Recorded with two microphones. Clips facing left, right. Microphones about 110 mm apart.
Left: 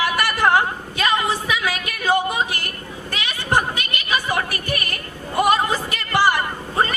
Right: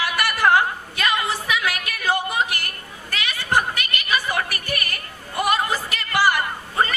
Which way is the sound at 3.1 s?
15° left (ahead or behind).